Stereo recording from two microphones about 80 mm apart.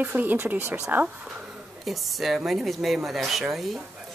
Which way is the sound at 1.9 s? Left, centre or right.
Centre.